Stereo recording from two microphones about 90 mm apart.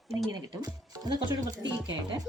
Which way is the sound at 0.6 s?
45° right (ahead or behind).